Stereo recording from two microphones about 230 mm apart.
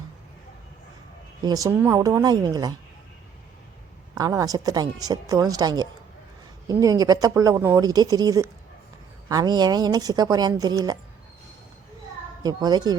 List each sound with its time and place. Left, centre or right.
1.5 s a woman's voice: centre
4.2 s a woman's voice: centre
12.4 s a woman's voice: centre